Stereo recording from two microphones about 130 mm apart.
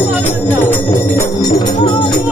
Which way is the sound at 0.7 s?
15° left (ahead or behind).